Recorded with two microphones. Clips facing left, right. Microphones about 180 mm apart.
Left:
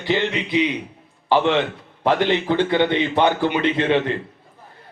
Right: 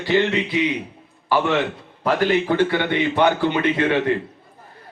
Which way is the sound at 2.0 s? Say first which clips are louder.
Even; 25° left (ahead or behind).